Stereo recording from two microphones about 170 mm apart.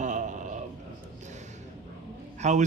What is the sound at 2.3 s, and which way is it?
Speech, 45° right (ahead or behind).